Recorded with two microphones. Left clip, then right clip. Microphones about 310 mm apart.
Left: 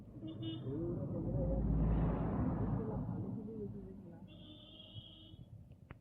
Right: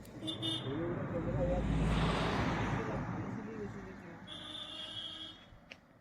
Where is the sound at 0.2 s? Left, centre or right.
Right.